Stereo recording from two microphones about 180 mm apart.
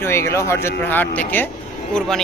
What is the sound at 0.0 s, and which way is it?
A man's voice, 15° left (ahead or behind).